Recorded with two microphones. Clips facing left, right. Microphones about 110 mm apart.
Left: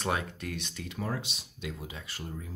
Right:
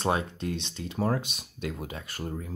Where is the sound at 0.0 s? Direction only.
30° right (ahead or behind).